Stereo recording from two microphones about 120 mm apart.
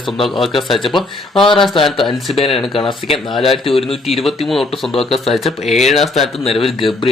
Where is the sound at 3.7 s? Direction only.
55° left (ahead or behind).